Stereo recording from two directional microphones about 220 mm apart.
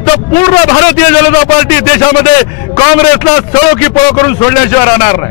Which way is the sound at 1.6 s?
15° left (ahead or behind).